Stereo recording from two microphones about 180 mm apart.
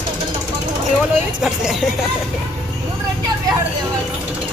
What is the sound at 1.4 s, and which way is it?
Speech, 5° right (ahead or behind).